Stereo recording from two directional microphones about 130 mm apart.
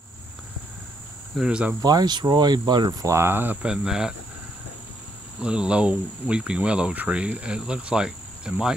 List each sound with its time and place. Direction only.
1.3 s speech: 5° right (ahead or behind)
1.8 s speech: 30° right (ahead or behind)
3.6 s speech: 5° right (ahead or behind)
5.4 s speech: 5° right (ahead or behind)